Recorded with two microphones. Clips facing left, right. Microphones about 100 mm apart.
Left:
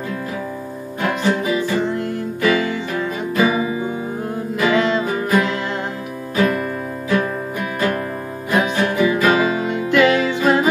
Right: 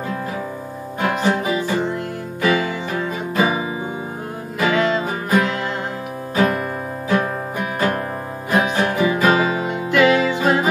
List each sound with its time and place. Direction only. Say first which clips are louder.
1.0 s music: even; 15° right (ahead or behind)
4.6 s music: left 1 dB; 5° right (ahead or behind)
6.3 s music: even; 20° right (ahead or behind)
8.5 s music: even; 40° right (ahead or behind)
8.7 s music: left 1 dB; 25° right (ahead or behind)
9.7 s music: even; 10° right (ahead or behind)